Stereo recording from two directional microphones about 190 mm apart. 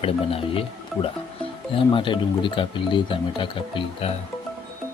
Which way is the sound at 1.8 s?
25° left (ahead or behind).